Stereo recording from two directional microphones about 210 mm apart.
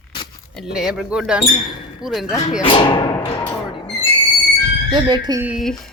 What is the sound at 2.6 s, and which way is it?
Music, 25° left (ahead or behind).